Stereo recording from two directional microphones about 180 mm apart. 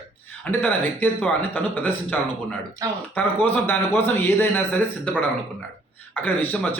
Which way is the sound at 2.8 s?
20° right (ahead or behind).